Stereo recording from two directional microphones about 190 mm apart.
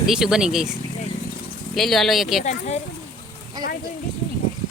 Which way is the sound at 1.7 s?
Centre (ahead or behind).